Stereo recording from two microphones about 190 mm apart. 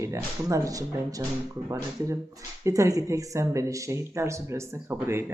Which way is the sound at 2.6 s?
15° right (ahead or behind).